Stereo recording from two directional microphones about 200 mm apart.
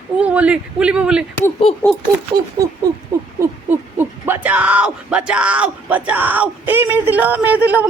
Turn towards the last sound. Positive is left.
turn(degrees=-10)  # may be behind; listen again after turning